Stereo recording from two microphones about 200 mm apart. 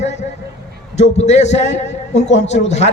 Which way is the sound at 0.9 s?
35° left (ahead or behind).